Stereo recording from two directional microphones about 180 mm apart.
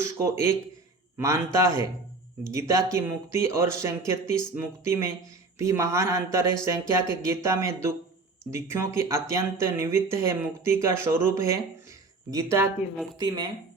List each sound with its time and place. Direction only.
0.0 s a man's voice: 15° right (ahead or behind)
1.5 s speech: 15° right (ahead or behind)